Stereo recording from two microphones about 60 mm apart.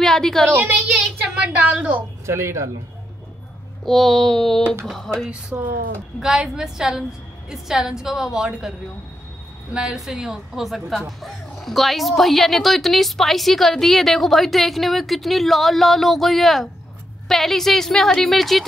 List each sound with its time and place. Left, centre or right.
0.0 s a woman's voice: centre
0.5 s a woman's voice: right
1.2 s a sound: centre
2.2 s speech: right
3.8 s a woman's voice: centre
5.5 s a woman's voice: right
6.1 s a woman's voice: centre
9.8 s a woman's voice: centre